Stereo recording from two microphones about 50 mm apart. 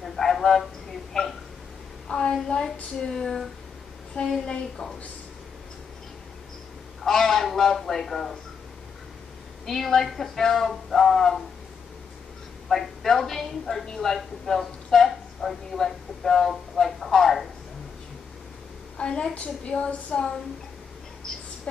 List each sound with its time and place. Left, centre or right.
0.0 s a sound: centre
2.4 s a man's voice: centre
7.0 s a man's voice: centre
9.7 s a woman's voice: centre
12.6 s a woman's voice: centre
18.9 s a man's voice: centre
19.3 s a woman's voice: left